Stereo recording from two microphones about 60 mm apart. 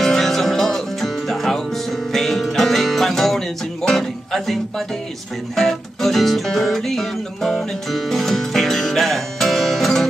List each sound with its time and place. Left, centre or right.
0.0 s music: centre